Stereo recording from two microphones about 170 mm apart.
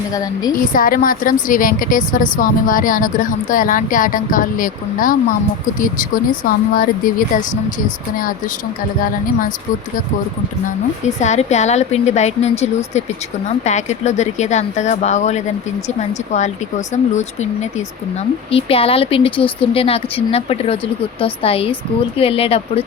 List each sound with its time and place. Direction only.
0.1 s a woman's voice: 20° left (ahead or behind)
0.5 s a woman's voice: 55° left (ahead or behind)
11.0 s a woman's voice: 45° left (ahead or behind)